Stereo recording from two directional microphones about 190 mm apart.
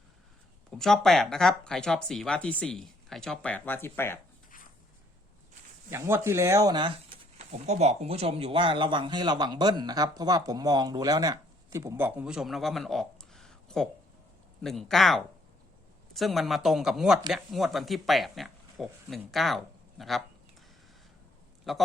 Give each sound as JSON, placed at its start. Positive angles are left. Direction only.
{"t": 0.7, "sound": "speech", "side_deg": 0}
{"t": 5.9, "sound": "speech", "side_deg": -15}
{"t": 21.6, "sound": "a man's voice", "side_deg": 0}